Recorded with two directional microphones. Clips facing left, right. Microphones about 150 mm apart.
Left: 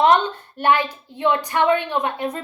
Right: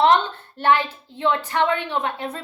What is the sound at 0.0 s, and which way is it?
A woman's voice, 15° left (ahead or behind).